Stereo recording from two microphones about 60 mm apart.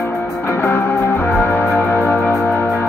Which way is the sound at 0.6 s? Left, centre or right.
Left.